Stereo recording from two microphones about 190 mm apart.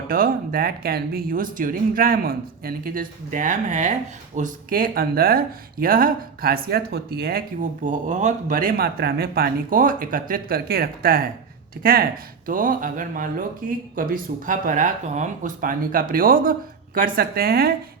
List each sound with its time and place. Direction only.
0.1 s speech: 50° right (ahead or behind)